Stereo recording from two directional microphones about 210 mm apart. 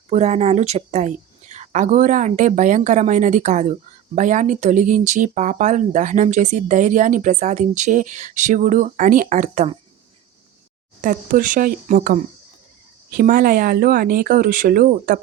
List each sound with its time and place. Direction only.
0.1 s a woman's voice: 30° right (ahead or behind)
11.0 s a woman's voice: 40° right (ahead or behind)